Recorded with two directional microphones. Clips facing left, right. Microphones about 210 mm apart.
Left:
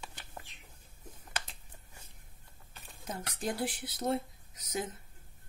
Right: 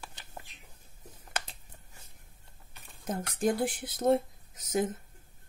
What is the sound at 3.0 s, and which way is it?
Speech, 50° right (ahead or behind).